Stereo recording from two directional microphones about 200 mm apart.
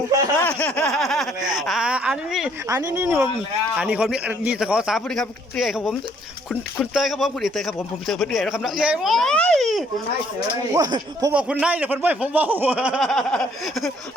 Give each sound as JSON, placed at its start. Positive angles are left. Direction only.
{"t": 0.3, "sound": "a man's voice", "side_deg": 10}
{"t": 10.8, "sound": "speech", "side_deg": -20}
{"t": 11.6, "sound": "speech", "side_deg": -10}